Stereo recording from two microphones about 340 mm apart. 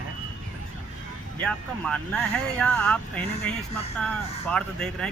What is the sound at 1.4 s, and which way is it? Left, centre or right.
Speech, centre.